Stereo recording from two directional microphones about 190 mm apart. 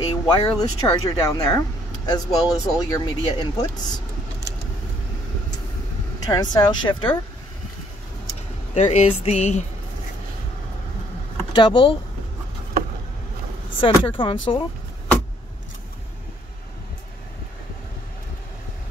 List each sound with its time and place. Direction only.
0.1 s a sound: 25° left (ahead or behind)
0.6 s speech: 15° left (ahead or behind)
6.1 s speech: 20° left (ahead or behind)
8.7 s speech: 35° left (ahead or behind)
11.5 s speech: 25° left (ahead or behind)
13.7 s speech: 25° left (ahead or behind)